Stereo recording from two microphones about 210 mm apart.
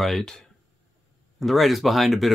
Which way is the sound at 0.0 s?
Centre (ahead or behind).